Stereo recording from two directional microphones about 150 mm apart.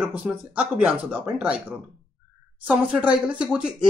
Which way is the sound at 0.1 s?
10° right (ahead or behind).